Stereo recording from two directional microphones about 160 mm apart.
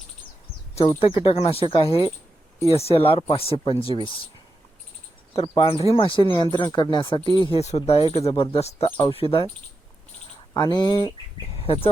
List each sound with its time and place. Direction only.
0.9 s speech: 35° left (ahead or behind)
5.3 s speech: 35° left (ahead or behind)
7.6 s speech: 40° left (ahead or behind)
10.5 s speech: 25° left (ahead or behind)